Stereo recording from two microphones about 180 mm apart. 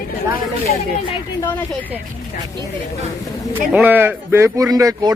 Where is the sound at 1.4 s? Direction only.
10° left (ahead or behind).